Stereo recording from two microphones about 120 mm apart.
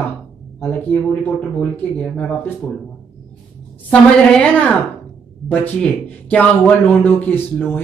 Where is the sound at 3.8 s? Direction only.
10° left (ahead or behind).